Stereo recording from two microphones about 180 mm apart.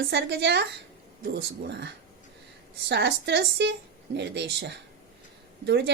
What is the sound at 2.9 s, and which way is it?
A woman's voice, 70° right (ahead or behind).